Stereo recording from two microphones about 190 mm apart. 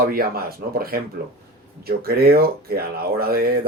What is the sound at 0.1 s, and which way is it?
A man's voice, 50° right (ahead or behind).